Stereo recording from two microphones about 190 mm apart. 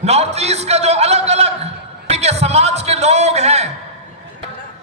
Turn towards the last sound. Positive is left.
turn(degrees=-35)  # may be behind; listen again after turning